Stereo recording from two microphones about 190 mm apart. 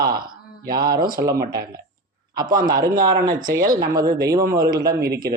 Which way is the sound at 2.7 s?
50° right (ahead or behind).